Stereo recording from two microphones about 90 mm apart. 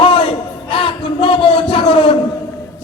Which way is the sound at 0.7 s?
85° left.